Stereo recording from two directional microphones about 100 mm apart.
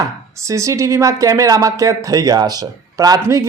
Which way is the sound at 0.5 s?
30° right (ahead or behind).